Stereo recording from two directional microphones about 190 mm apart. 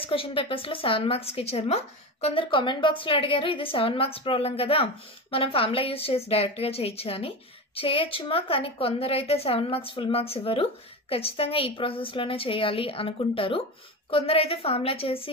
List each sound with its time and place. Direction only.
0.0 s a woman's voice: 30° left (ahead or behind)